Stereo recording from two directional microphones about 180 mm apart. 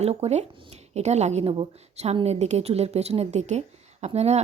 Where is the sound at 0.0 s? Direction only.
35° right (ahead or behind).